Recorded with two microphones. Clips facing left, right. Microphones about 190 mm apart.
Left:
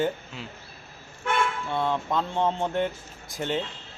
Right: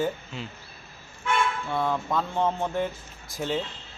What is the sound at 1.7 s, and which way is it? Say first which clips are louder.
Speech: even; 20° left (ahead or behind).